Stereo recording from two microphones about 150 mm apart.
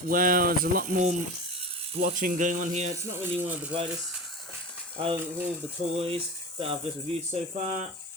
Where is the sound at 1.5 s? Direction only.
40° right (ahead or behind).